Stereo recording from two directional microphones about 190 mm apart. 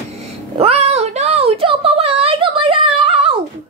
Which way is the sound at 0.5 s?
30° right (ahead or behind).